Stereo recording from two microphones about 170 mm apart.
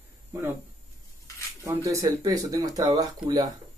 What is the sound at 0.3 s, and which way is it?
Speech, 15° right (ahead or behind).